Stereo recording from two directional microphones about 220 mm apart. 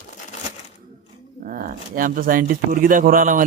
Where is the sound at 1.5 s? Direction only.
40° right (ahead or behind).